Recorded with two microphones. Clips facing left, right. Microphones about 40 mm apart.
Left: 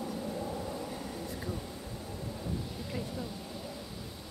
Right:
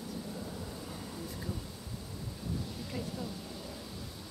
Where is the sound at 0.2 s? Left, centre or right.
Left.